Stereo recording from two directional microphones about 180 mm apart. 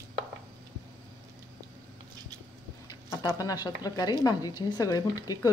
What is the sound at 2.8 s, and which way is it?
Speech, 20° left (ahead or behind).